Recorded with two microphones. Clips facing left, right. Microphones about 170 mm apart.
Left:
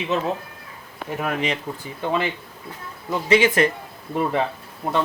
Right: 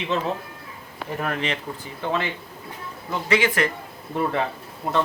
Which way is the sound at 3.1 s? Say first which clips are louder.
Left 4 dB; 20° left (ahead or behind).